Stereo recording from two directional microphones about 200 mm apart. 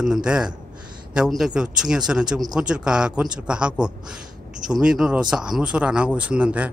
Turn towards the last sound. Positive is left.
turn(degrees=-5)  # may be behind; listen again after turning